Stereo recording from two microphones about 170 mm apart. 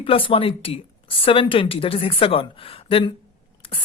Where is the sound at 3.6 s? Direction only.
30° left (ahead or behind).